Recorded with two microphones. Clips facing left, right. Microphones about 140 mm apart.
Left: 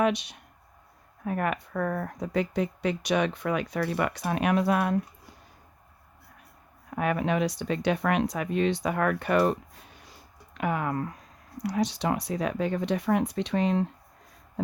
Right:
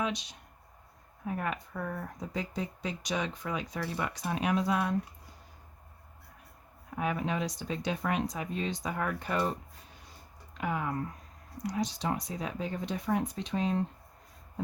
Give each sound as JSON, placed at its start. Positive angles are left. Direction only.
{"t": 0.0, "sound": "speech", "side_deg": 65}
{"t": 6.9, "sound": "speech", "side_deg": 65}
{"t": 10.1, "sound": "a sound", "side_deg": 65}
{"t": 11.6, "sound": "speech", "side_deg": 70}